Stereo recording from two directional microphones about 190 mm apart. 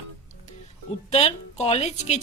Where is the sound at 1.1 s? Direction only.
35° left (ahead or behind).